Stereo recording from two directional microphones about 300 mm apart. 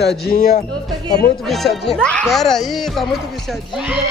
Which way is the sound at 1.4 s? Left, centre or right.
Centre.